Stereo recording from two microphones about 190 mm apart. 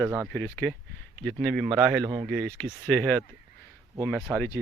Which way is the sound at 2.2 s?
5° left (ahead or behind).